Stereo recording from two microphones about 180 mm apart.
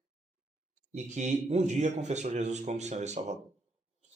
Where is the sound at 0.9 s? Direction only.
40° right (ahead or behind).